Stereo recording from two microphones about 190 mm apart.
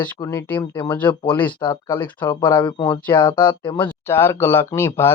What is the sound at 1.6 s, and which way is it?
Speech, 25° left (ahead or behind).